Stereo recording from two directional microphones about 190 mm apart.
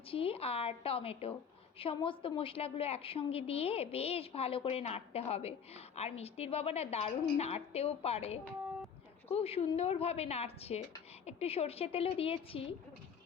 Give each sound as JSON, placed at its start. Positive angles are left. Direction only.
{"t": 0.1, "sound": "a woman's voice", "side_deg": 30}